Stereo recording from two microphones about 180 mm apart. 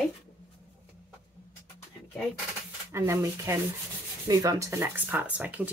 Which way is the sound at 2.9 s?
15° right (ahead or behind).